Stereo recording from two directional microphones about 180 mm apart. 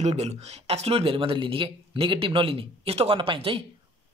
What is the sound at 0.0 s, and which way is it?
Speech, 35° right (ahead or behind).